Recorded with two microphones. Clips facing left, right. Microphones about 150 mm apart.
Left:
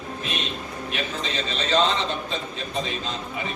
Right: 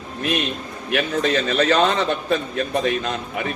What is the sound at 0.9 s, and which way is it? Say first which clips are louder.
A man's voice: right 10 dB; 60° right (ahead or behind).